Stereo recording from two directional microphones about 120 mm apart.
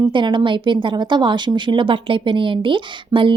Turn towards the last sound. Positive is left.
turn(degrees=-45)  # may be behind; listen again after turning